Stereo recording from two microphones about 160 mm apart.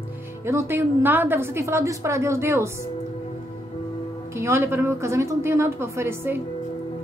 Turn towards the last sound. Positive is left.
turn(degrees=-15)  # may be behind; listen again after turning